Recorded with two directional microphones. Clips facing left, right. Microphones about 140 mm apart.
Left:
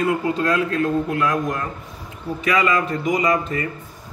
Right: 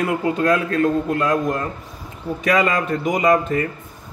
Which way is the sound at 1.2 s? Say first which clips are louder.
Right 2 dB; 30° right (ahead or behind).